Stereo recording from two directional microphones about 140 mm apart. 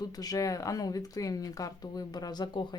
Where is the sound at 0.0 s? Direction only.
25° left (ahead or behind).